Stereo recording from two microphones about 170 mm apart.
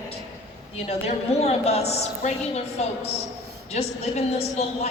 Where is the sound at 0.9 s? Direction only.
35° left (ahead or behind).